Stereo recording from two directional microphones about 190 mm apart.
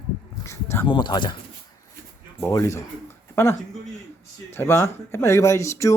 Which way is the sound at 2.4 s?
15° left (ahead or behind).